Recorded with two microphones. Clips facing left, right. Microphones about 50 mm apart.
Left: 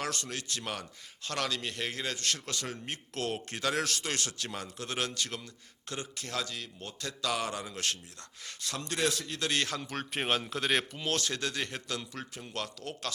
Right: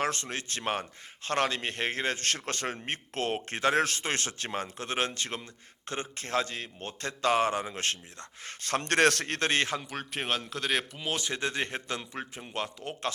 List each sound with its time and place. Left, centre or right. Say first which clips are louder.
0.0 s a man's voice: right 5 dB; right
8.4 s speech: right 8 dB; right
9.5 s speech: right 2 dB; right
9.8 s speech: left 1 dB; centre; by 13.1 s right